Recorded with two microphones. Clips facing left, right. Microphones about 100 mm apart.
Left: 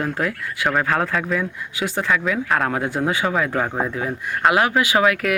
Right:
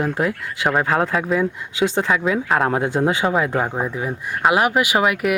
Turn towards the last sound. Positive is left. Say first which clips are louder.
# even
turn(degrees=-15)  # may be behind; listen again after turning